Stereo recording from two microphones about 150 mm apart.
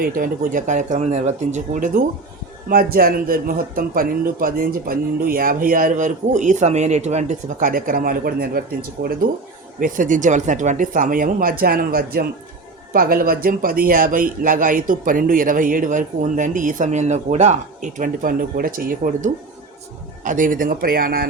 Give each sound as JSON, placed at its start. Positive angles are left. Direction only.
{"t": 0.0, "sound": "speech", "side_deg": -65}
{"t": 2.6, "sound": "a man's voice", "side_deg": -75}
{"t": 9.8, "sound": "a man's voice", "side_deg": -60}